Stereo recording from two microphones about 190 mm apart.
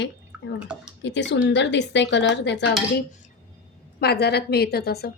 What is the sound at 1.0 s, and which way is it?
Speech, 70° left (ahead or behind).